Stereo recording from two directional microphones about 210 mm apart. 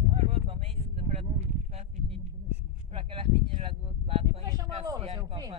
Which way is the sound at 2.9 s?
25° right (ahead or behind).